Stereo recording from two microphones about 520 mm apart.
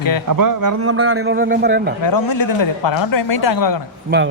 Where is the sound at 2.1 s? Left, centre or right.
Left.